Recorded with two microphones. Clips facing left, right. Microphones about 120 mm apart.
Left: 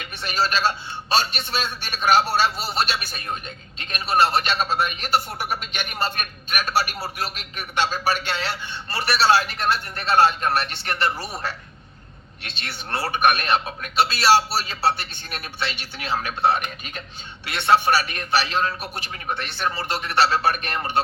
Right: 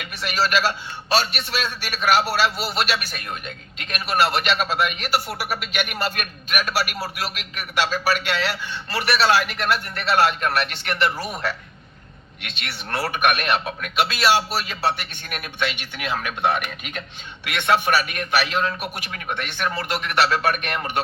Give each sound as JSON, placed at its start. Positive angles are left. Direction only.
{"t": 0.0, "sound": "a man's voice", "side_deg": 35}
{"t": 12.4, "sound": "a man's voice", "side_deg": 40}